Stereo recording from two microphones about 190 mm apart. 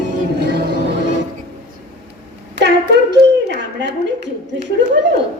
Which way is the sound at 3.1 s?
60° right (ahead or behind).